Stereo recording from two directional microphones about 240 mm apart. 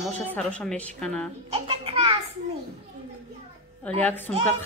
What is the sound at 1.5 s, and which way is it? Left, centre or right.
Music, right.